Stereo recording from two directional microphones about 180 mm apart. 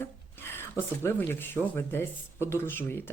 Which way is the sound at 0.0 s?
15° left (ahead or behind).